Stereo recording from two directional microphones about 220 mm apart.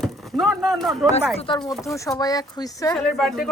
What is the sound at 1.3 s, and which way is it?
Speech, 25° left (ahead or behind).